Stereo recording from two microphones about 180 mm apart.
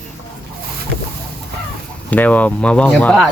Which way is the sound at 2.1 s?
10° left (ahead or behind).